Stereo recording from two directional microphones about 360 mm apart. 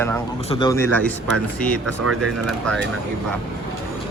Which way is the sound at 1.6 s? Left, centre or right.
Right.